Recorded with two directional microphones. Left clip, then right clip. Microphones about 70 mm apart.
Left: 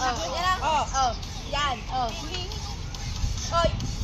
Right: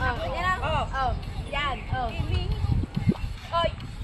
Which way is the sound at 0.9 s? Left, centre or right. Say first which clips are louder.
Left 3 dB; right.